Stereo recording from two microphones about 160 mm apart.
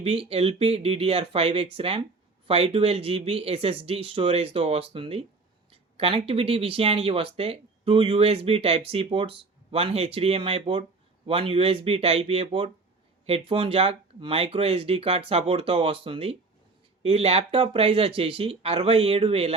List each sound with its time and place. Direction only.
0.0 s speech: 35° right (ahead or behind)